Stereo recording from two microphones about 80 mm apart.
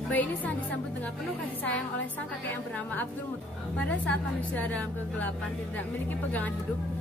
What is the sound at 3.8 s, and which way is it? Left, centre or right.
A woman's voice, centre.